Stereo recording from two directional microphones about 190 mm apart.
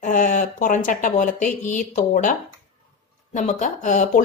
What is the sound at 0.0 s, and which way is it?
Speech, 40° left (ahead or behind).